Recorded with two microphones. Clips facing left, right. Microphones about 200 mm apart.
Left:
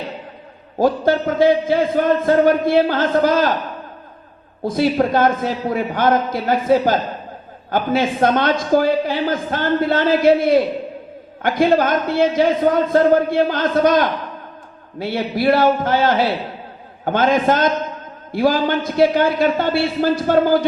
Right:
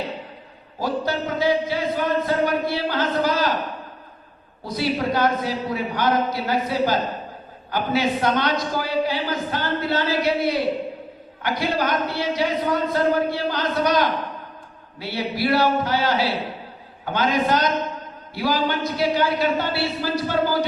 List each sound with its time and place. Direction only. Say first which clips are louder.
0.8 s a man's voice: left 8 dB; 50° left (ahead or behind)
4.6 s a man's voice: left 7 dB; 50° left (ahead or behind)